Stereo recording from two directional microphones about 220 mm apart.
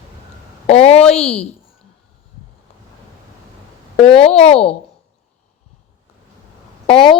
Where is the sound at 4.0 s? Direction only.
25° left (ahead or behind).